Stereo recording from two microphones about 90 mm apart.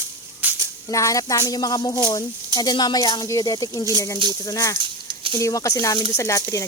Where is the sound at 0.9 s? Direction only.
35° left (ahead or behind).